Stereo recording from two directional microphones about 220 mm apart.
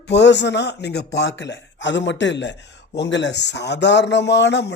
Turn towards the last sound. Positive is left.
turn(degrees=50)  # may be behind; listen again after turning